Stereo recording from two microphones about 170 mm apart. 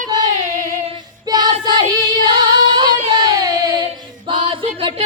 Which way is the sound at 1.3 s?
25° right (ahead or behind).